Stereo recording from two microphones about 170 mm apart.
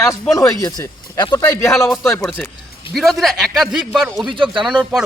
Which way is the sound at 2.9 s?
Centre (ahead or behind).